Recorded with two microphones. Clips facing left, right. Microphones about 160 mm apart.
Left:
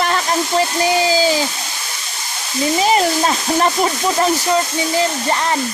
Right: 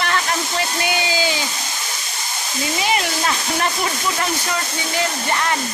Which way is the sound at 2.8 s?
35° left (ahead or behind).